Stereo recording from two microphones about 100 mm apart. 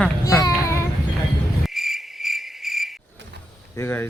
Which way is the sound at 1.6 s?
Centre (ahead or behind).